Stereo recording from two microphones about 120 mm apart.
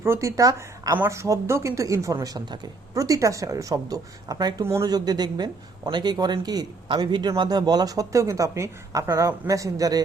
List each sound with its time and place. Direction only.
0.0 s a woman's voice: 25° right (ahead or behind)
4.6 s speech: 20° right (ahead or behind)
4.9 s speech: 35° right (ahead or behind)